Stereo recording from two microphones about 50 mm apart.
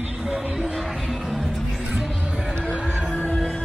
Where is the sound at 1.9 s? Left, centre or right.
Centre.